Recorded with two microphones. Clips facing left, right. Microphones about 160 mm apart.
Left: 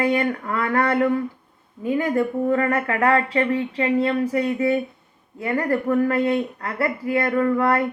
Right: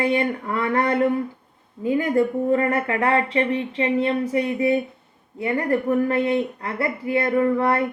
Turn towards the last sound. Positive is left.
turn(degrees=-25)  # may be behind; listen again after turning